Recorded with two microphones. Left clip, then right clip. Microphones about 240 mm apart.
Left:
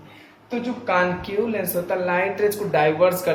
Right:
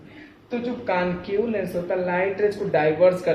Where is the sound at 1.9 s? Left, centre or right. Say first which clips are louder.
Left 1 dB; centre.